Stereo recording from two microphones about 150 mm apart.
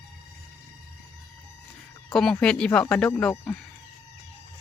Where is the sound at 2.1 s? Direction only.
5° left (ahead or behind).